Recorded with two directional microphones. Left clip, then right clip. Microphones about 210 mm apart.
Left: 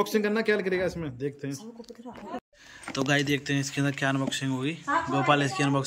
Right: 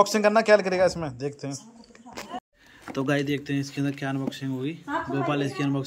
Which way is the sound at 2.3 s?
25° left (ahead or behind).